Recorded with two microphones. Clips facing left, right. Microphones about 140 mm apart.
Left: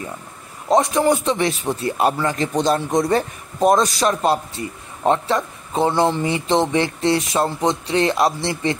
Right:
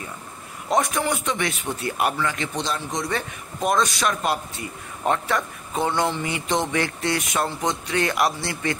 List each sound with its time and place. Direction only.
0.7 s a man's voice: 25° left (ahead or behind); by 3.2 s 50° left (ahead or behind)
3.2 s a man's voice: 35° left (ahead or behind)